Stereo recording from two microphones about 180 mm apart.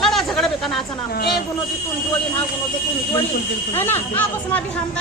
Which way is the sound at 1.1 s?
65° left (ahead or behind).